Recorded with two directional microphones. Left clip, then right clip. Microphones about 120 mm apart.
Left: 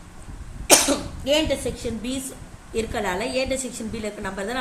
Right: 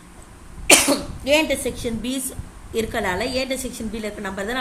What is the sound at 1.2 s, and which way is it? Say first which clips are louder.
A woman's voice: right 3 dB; 35° right (ahead or behind).